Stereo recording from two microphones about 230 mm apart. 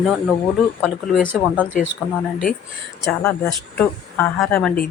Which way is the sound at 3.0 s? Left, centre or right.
Centre.